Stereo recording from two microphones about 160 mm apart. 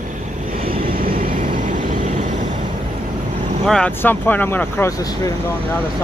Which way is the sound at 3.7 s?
10° left (ahead or behind).